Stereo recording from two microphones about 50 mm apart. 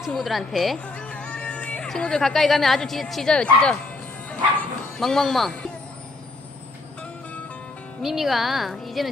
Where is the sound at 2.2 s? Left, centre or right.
Centre.